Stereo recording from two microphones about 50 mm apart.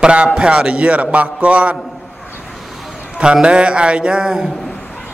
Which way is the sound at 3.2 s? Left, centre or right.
Centre.